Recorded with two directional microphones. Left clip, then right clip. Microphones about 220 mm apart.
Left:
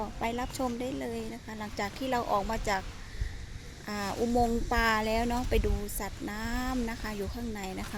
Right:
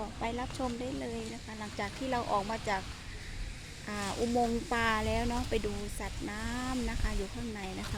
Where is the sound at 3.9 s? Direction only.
20° left (ahead or behind).